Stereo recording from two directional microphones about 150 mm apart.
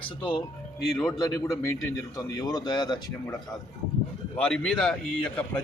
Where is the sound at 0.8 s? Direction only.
Centre (ahead or behind).